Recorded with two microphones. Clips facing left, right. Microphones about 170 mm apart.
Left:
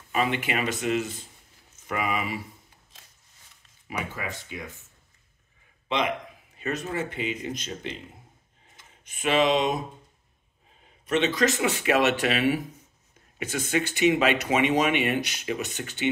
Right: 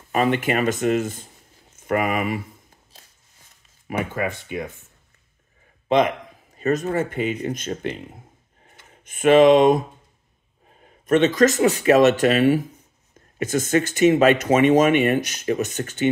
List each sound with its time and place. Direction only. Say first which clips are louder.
0.1 s speech: right 6 dB; 50° right (ahead or behind)
4.1 s speech: right 9 dB; 55° right (ahead or behind)
5.9 s speech: right 8 dB; 45° right (ahead or behind)
10.8 s speech: right 7 dB; 50° right (ahead or behind)